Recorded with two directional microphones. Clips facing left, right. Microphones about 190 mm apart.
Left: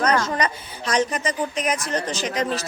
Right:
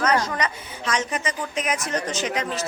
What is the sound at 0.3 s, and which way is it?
A woman's voice, 35° left (ahead or behind).